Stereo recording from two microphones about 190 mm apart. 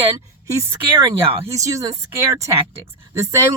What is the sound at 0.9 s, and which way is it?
Speech, 15° right (ahead or behind).